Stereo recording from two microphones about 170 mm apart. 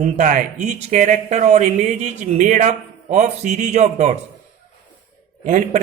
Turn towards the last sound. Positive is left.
turn(degrees=-50)  # may be behind; listen again after turning